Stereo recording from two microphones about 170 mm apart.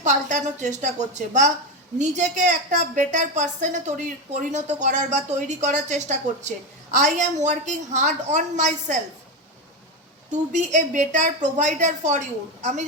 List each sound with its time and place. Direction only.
0.0 s a woman's voice: 45° right (ahead or behind)
10.3 s a woman's voice: 45° right (ahead or behind)